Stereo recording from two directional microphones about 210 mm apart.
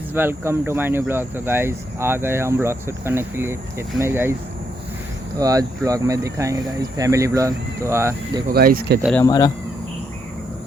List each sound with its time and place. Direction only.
0.1 s speech: 10° right (ahead or behind)
5.4 s speech: 15° right (ahead or behind)
8.5 s speech: 45° right (ahead or behind)
9.2 s speech: 20° left (ahead or behind)